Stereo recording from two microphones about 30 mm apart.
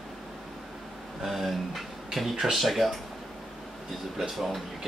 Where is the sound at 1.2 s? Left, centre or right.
Centre.